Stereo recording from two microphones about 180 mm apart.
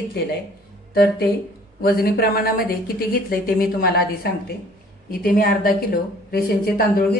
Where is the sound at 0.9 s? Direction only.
55° left (ahead or behind).